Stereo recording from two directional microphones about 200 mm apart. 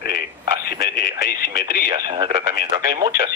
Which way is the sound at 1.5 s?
20° right (ahead or behind).